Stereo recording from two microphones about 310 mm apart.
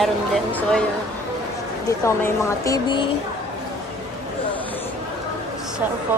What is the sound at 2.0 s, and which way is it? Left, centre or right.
Speech, centre.